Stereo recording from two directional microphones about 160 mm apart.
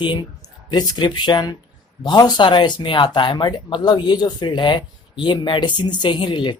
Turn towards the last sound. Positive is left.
turn(degrees=30)  # may be behind; listen again after turning